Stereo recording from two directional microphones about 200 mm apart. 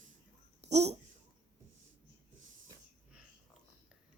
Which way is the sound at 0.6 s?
30° right (ahead or behind).